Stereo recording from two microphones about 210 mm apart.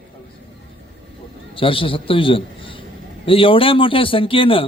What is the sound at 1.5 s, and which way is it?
A man's voice, 25° left (ahead or behind).